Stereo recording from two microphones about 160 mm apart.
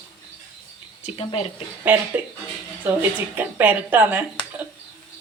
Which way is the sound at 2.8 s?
10° right (ahead or behind).